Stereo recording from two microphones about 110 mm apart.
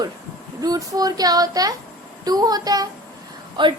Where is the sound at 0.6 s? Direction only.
35° right (ahead or behind).